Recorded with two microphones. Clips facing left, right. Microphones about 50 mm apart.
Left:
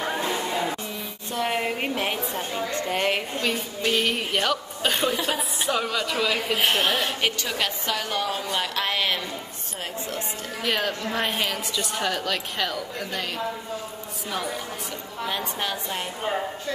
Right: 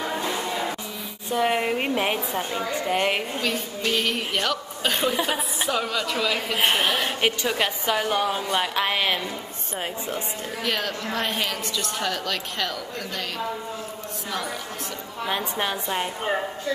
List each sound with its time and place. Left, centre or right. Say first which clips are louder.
0.0 s music: left 1 dB; left
0.4 s music: left 1 dB; centre
1.3 s a woman's voice: right 3 dB; centre
3.4 s a woman's voice: left 2 dB; centre
5.1 s a woman's voice: right 1 dB; centre
5.4 s a woman's voice: even; centre
6.7 s a woman's voice: even; centre
10.6 s a woman's voice: left 2 dB; centre
15.2 s a woman's voice: right 2 dB; centre